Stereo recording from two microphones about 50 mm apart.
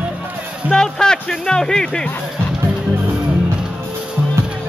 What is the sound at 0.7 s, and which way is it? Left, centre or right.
Music, centre.